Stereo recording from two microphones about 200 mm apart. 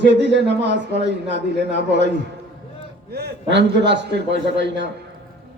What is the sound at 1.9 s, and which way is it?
A man's voice, 60° right (ahead or behind).